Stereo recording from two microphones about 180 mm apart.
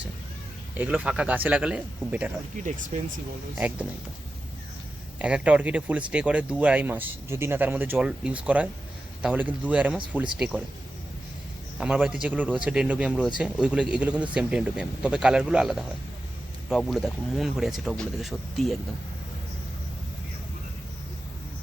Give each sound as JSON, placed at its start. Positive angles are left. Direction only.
{"t": 0.7, "sound": "speech", "side_deg": -10}
{"t": 2.6, "sound": "speech", "side_deg": -45}
{"t": 5.2, "sound": "speech", "side_deg": -5}
{"t": 11.8, "sound": "speech", "side_deg": -5}